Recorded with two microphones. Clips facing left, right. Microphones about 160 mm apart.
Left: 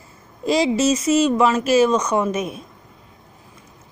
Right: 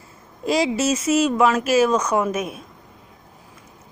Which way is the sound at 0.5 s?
5° right (ahead or behind).